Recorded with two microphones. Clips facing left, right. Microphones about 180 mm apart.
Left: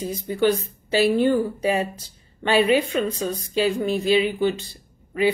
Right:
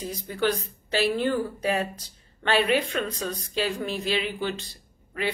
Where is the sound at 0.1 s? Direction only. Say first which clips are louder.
Left 6 dB; centre (ahead or behind).